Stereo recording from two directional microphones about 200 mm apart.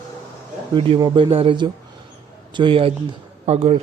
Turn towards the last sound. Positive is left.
turn(degrees=-35)  # may be behind; listen again after turning